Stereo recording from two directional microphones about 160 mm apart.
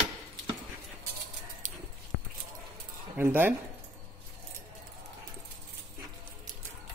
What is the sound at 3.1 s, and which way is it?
Speech, 10° right (ahead or behind).